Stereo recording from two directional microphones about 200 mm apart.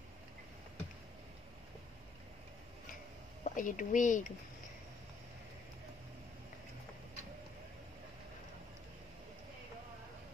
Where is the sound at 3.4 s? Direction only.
40° left (ahead or behind).